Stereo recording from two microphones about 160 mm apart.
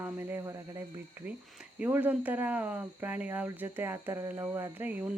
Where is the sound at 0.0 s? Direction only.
15° right (ahead or behind).